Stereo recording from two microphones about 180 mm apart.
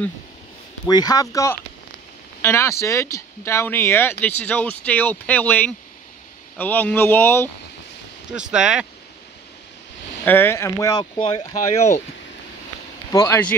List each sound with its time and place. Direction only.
0.8 s speech: 20° left (ahead or behind)
8.3 s speech: 5° right (ahead or behind)
10.2 s speech: 10° left (ahead or behind); by 11.9 s 35° left (ahead or behind)